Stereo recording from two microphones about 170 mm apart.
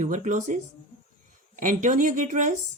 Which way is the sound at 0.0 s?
45° right (ahead or behind).